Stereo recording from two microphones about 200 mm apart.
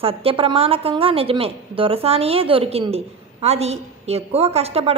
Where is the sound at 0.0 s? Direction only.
30° right (ahead or behind).